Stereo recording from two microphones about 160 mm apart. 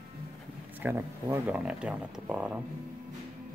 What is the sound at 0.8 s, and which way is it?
Speech, 15° right (ahead or behind).